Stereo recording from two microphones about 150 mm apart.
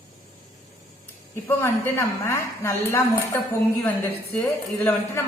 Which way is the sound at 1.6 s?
15° left (ahead or behind).